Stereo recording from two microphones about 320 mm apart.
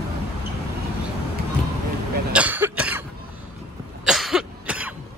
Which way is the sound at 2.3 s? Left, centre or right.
Centre.